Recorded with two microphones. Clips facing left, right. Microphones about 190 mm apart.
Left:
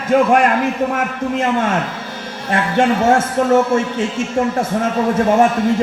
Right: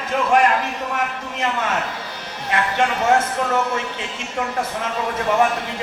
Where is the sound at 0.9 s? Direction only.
50° left (ahead or behind).